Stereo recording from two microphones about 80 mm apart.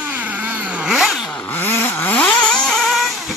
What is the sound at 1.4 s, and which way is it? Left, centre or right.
Vehicle, left.